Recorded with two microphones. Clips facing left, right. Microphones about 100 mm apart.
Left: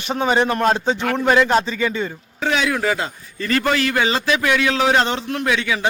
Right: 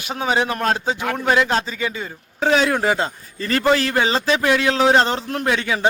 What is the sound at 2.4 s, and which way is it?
A man's voice, 35° right (ahead or behind).